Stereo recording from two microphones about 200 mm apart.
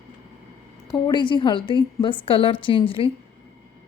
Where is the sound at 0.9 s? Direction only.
20° left (ahead or behind).